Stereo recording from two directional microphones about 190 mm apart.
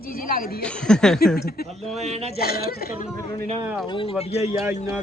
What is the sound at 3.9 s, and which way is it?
Speech, 30° left (ahead or behind).